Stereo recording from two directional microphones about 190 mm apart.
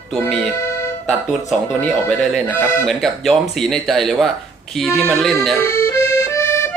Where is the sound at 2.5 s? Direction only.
10° left (ahead or behind).